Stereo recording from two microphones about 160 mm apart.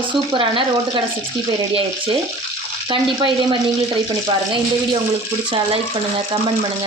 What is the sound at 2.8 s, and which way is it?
Speech, 30° right (ahead or behind).